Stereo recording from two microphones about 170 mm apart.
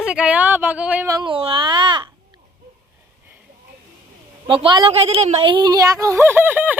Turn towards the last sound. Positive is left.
turn(degrees=-10)  # may be behind; listen again after turning